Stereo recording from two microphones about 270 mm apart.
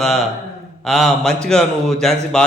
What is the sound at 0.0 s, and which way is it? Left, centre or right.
Speech, centre.